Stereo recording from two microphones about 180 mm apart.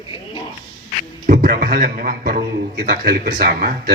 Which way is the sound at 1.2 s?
50° right (ahead or behind).